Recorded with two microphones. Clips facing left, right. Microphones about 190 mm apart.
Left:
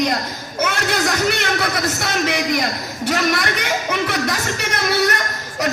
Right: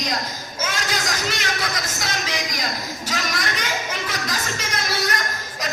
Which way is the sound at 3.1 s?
60° left (ahead or behind).